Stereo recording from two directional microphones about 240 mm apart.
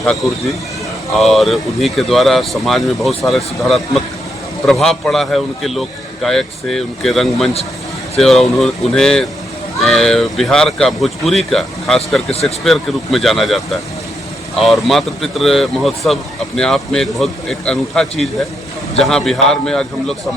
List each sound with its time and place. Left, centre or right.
0.0 s speech: centre